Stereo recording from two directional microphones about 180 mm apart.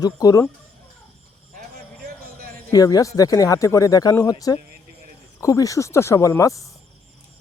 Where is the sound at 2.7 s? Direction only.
20° left (ahead or behind).